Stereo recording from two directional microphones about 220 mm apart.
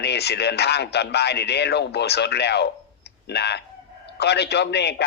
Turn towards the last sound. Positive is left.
turn(degrees=50)  # may be behind; listen again after turning